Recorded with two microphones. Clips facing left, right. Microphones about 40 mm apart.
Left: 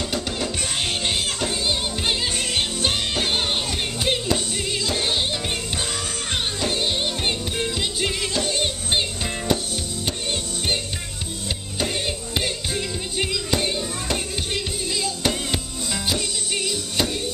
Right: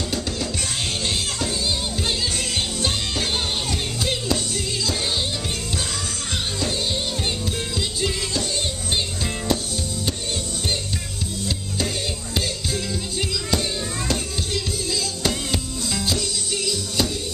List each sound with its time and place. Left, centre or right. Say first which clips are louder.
2.8 s music: left 1 dB; left
8.9 s music: left 1 dB; left
12.4 s music: even; left
16.6 s music: right 1 dB; left